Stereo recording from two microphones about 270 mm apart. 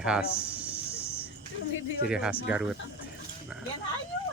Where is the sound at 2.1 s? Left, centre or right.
Centre.